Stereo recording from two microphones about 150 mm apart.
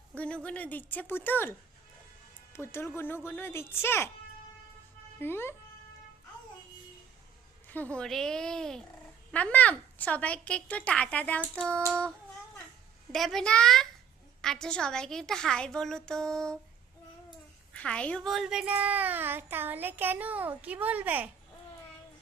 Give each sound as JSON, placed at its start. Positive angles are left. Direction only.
{"t": 0.1, "sound": "a sound", "side_deg": 10}
{"t": 0.4, "sound": "a woman's voice", "side_deg": 10}
{"t": 5.2, "sound": "a woman's voice", "side_deg": 15}
{"t": 7.9, "sound": "a woman's voice", "side_deg": 5}
{"t": 17.7, "sound": "a child's voice", "side_deg": 5}